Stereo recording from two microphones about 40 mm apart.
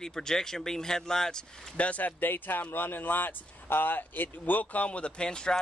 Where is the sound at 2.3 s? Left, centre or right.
Left.